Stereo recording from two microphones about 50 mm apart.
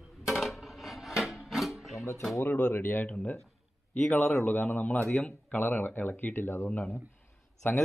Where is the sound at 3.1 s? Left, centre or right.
Left.